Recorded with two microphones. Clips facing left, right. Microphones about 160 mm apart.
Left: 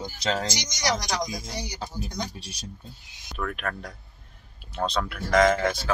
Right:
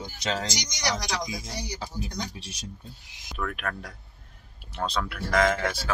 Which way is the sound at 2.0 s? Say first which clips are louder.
Left 3 dB; 35° left (ahead or behind).